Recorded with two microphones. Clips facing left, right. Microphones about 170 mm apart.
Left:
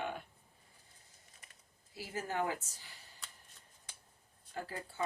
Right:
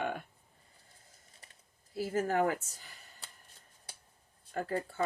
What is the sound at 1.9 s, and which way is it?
Speech, 50° right (ahead or behind).